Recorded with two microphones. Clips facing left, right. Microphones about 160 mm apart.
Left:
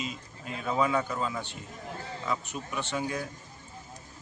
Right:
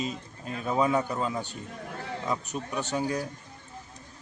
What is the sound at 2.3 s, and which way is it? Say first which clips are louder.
Speech: right 1 dB; 40° right (ahead or behind).